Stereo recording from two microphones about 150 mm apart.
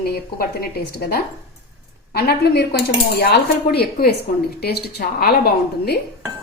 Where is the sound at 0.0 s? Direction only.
85° left.